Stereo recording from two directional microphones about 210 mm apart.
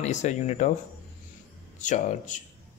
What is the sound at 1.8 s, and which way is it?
Speech, 35° left (ahead or behind).